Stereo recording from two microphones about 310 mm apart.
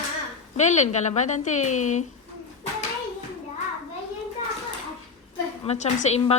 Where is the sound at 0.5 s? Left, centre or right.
Left.